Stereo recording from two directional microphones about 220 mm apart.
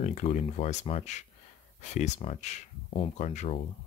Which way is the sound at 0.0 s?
30° left (ahead or behind).